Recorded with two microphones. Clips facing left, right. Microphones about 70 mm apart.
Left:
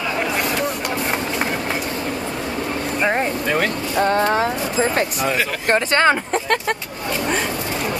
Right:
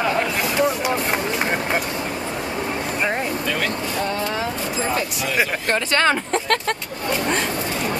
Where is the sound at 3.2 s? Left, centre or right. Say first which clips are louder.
Left 4 dB; left.